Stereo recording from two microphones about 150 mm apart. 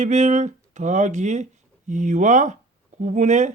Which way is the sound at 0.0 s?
50° right (ahead or behind).